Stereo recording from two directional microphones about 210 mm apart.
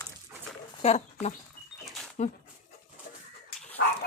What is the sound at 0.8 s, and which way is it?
Speech, 30° left (ahead or behind).